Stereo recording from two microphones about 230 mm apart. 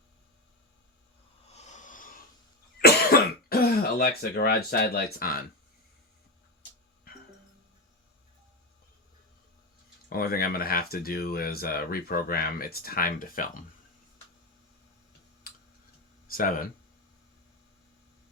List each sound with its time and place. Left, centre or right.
1.5 s a sound: left
2.7 s cough: left
10.1 s speech: left
15.5 s tick-tock: left
16.2 s speech: left